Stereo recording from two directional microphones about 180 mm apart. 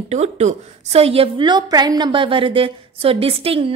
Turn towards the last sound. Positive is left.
turn(degrees=-30)  # may be behind; listen again after turning